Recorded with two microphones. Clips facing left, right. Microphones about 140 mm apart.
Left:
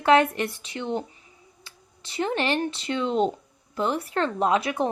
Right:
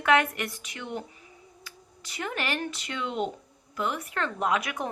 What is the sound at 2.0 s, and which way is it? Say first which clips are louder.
Speech: left 7 dB; 30° left (ahead or behind).